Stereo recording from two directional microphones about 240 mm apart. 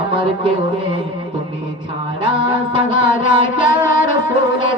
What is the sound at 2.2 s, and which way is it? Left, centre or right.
Music, centre.